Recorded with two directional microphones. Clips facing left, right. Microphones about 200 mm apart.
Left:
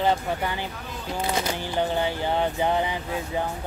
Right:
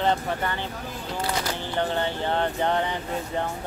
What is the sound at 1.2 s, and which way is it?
Speech, 20° left (ahead or behind).